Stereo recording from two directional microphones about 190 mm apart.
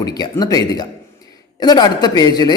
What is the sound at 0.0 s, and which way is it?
A man's voice, 20° left (ahead or behind).